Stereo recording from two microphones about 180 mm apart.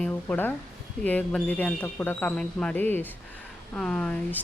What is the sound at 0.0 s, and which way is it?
Speech, 10° left (ahead or behind).